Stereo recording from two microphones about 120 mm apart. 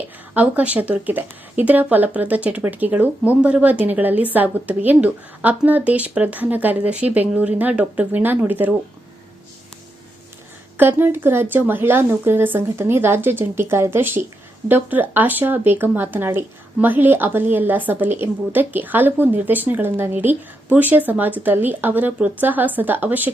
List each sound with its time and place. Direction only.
0.3 s speech: 15° right (ahead or behind)
10.8 s speech: 15° right (ahead or behind)